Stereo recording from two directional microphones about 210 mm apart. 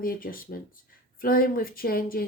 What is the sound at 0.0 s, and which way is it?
Speech, 45° left (ahead or behind).